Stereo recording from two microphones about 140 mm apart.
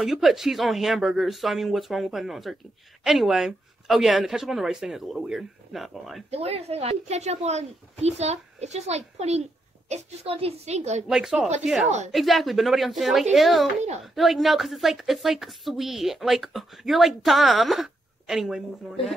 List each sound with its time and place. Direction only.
0.0 s a woman's voice: centre (ahead or behind)
6.3 s speech: 45° right (ahead or behind)
11.1 s a woman's voice: 5° right (ahead or behind)